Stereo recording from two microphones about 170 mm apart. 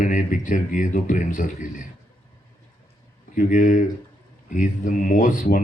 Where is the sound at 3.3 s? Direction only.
50° left (ahead or behind).